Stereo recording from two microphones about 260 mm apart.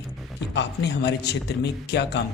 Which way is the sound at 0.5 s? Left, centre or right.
Left.